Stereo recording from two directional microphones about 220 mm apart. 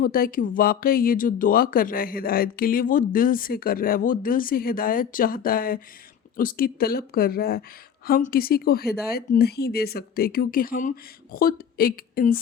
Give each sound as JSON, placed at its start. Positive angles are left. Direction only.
{"t": 0.0, "sound": "speech", "side_deg": 40}